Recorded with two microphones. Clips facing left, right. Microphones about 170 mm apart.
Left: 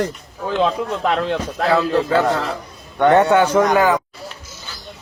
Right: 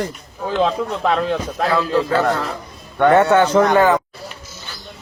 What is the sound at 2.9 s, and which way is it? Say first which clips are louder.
A man's voice: even; 15° left (ahead or behind).